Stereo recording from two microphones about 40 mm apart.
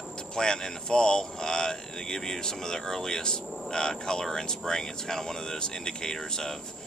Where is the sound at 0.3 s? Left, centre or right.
Centre.